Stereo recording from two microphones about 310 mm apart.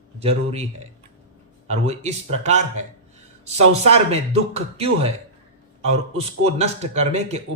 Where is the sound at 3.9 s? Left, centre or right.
Right.